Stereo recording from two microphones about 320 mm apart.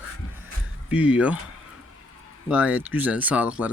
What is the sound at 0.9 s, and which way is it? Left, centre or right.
Speech, centre.